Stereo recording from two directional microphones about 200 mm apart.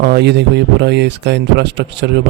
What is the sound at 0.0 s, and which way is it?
A man's voice, 55° right (ahead or behind).